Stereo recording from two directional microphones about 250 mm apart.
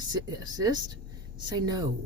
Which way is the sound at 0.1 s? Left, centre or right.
Centre.